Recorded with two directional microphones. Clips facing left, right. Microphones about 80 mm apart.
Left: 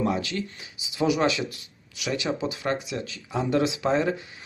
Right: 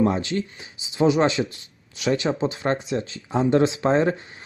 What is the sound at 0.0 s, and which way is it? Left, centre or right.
Speech, right.